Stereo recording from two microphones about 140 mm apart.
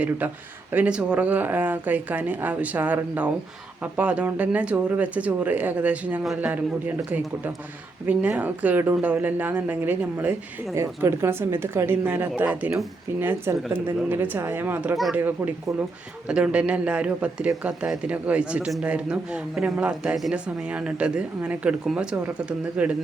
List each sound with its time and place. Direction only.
0.7 s a man's voice: 10° right (ahead or behind)